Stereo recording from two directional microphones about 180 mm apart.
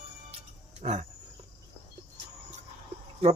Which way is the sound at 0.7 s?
40° right (ahead or behind).